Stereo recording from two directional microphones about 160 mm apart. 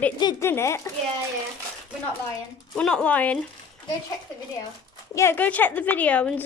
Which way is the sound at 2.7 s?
5° left (ahead or behind).